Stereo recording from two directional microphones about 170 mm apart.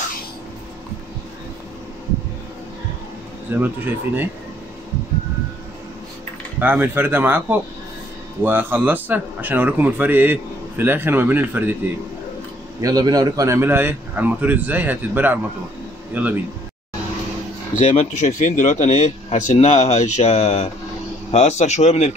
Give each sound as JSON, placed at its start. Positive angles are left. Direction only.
{"t": 3.5, "sound": "a man's voice", "side_deg": -10}
{"t": 6.6, "sound": "a man's voice", "side_deg": -10}
{"t": 12.8, "sound": "a man's voice", "side_deg": -20}
{"t": 17.7, "sound": "speech", "side_deg": 45}